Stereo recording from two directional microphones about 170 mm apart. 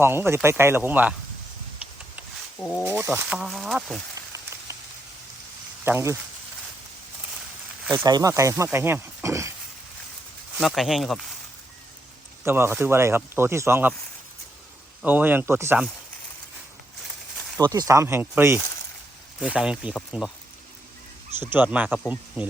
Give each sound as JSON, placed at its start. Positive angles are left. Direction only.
{"t": 0.0, "sound": "speech", "side_deg": -15}
{"t": 2.6, "sound": "speech", "side_deg": 15}
{"t": 2.8, "sound": "speech", "side_deg": -10}
{"t": 4.3, "sound": "rain on surface", "side_deg": -15}
{"t": 5.8, "sound": "speech", "side_deg": -15}
{"t": 8.0, "sound": "speech", "side_deg": -20}
{"t": 10.6, "sound": "speech", "side_deg": 0}
{"t": 12.5, "sound": "speech", "side_deg": -15}
{"t": 15.0, "sound": "speech", "side_deg": -10}
{"t": 17.6, "sound": "speech", "side_deg": -20}
{"t": 21.5, "sound": "speech", "side_deg": -10}